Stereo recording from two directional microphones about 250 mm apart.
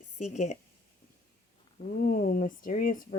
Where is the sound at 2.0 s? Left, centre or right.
Left.